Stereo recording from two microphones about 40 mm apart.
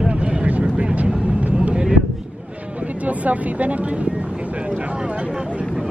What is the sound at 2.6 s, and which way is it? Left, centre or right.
Vehicle, right.